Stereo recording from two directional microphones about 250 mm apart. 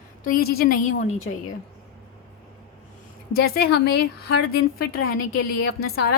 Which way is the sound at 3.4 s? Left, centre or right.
Left.